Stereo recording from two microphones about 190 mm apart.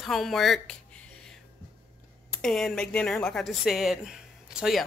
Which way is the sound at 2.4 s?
Centre (ahead or behind).